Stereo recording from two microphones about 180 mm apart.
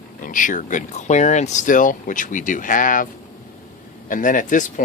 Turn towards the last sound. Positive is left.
turn(degrees=45)  # may be behind; listen again after turning